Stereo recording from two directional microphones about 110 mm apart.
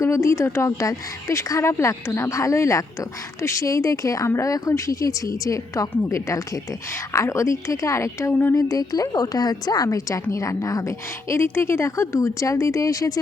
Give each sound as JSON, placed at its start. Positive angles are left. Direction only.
{"t": 0.0, "sound": "a woman's voice", "side_deg": 25}
{"t": 8.7, "sound": "a woman's voice", "side_deg": 35}